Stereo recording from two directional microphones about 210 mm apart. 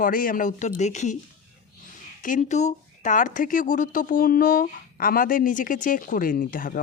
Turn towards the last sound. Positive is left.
turn(degrees=40)  # may be behind; listen again after turning